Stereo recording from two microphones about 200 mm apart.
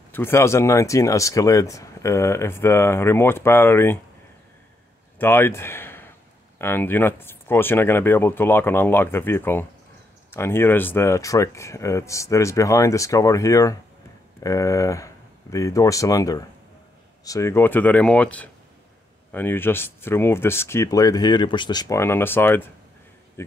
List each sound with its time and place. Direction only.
0.1 s speech: 10° left (ahead or behind)
5.2 s speech: 10° left (ahead or behind)